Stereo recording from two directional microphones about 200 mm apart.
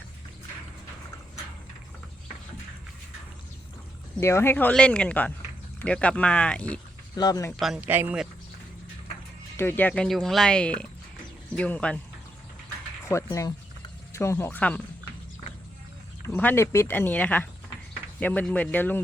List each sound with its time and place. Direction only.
4.2 s speech: 15° left (ahead or behind)
7.2 s speech: 20° left (ahead or behind)
7.6 s speech: 5° right (ahead or behind)
9.6 s speech: 10° left (ahead or behind)
13.1 s speech: 15° left (ahead or behind)
16.2 s speech: 10° left (ahead or behind)